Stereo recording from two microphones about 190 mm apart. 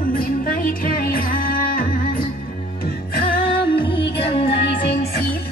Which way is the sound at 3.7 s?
25° left (ahead or behind).